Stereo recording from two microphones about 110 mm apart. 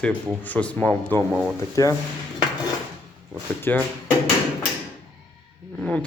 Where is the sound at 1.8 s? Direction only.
30° left (ahead or behind).